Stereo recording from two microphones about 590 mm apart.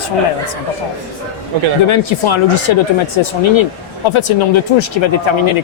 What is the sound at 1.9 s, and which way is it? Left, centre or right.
Speech, left.